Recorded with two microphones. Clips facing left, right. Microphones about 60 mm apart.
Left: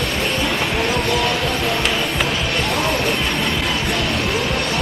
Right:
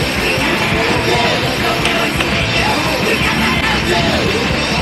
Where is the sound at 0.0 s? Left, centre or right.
Right.